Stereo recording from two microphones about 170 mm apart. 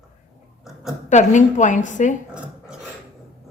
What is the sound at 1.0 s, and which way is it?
A woman's voice, 45° left (ahead or behind).